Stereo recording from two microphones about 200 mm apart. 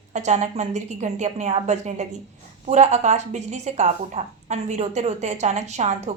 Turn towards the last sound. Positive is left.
turn(degrees=-35)  # may be behind; listen again after turning